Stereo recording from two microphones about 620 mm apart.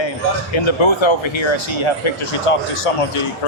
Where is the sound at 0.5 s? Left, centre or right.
Left.